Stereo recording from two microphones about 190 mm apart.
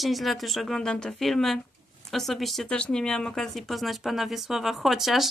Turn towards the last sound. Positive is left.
turn(degrees=0)  # may be behind; listen again after turning